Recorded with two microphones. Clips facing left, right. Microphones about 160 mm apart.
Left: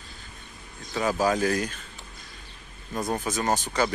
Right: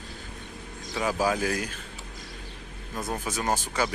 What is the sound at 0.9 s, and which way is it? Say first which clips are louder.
Speech: left 2 dB; 10° right (ahead or behind).